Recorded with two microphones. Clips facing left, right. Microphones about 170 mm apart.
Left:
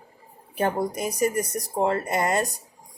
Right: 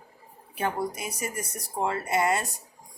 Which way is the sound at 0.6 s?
40° left (ahead or behind).